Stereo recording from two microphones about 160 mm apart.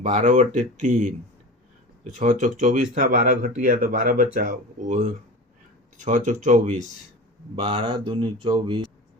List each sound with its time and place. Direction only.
0.0 s speech: 50° right (ahead or behind)
2.0 s speech: 50° right (ahead or behind)
7.6 s speech: 35° right (ahead or behind)